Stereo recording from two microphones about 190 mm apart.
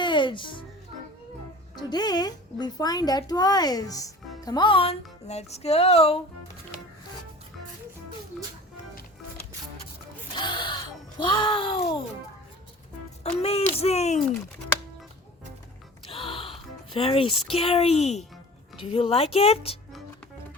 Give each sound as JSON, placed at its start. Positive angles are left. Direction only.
{"t": 0.0, "sound": "music", "side_deg": 25}
{"t": 1.7, "sound": "speech", "side_deg": 20}
{"t": 10.3, "sound": "a sound", "side_deg": 25}
{"t": 13.4, "sound": "speech", "side_deg": 35}
{"t": 16.0, "sound": "music", "side_deg": 25}
{"t": 18.8, "sound": "speech", "side_deg": 30}